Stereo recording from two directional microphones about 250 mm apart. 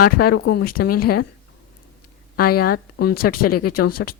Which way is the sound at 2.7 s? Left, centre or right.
Left.